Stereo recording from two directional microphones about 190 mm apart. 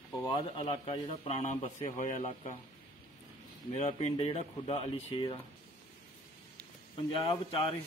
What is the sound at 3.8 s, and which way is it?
Speech, 35° left (ahead or behind).